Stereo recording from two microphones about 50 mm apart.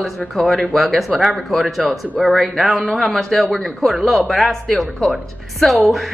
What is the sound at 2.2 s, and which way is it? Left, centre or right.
A woman's voice, centre.